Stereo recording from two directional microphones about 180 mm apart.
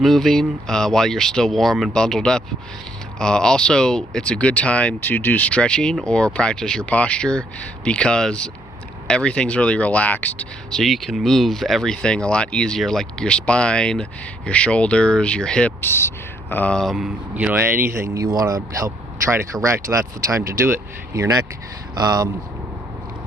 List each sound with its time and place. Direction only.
0.0 s speech: centre (ahead or behind); by 22.3 s 20° right (ahead or behind)